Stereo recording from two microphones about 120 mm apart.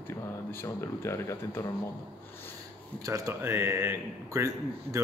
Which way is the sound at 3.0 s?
25° right (ahead or behind).